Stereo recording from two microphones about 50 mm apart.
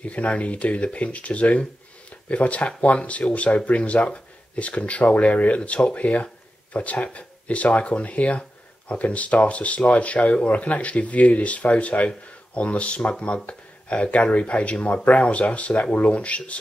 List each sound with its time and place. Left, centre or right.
0.0 s speech: left